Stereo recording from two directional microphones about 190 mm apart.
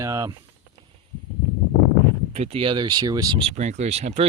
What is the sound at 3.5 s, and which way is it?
Speech, 35° right (ahead or behind).